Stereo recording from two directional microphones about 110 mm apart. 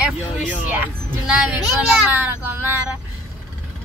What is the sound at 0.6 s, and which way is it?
Speech, 10° right (ahead or behind).